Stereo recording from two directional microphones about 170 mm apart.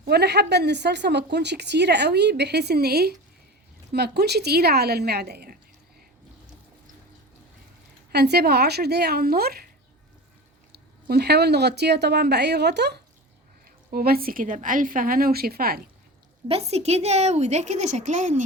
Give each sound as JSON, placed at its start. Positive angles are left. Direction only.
{"t": 0.0, "sound": "a woman's voice", "side_deg": -70}
{"t": 8.1, "sound": "a woman's voice", "side_deg": -75}
{"t": 10.7, "sound": "a woman's voice", "side_deg": -70}
{"t": 13.9, "sound": "a woman's voice", "side_deg": -60}
{"t": 16.5, "sound": "a woman's voice", "side_deg": -40}